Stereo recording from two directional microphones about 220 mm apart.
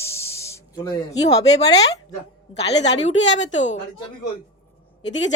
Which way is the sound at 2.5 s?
50° left (ahead or behind).